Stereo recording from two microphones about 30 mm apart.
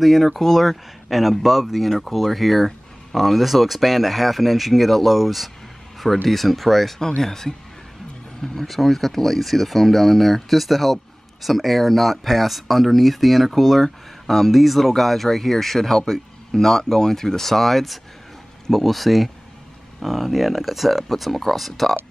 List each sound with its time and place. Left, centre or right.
0.0 s speech: centre
7.0 s speech: left
8.6 s speech: centre